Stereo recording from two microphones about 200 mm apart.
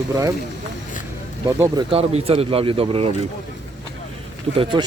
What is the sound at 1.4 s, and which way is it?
Speech, 15° right (ahead or behind).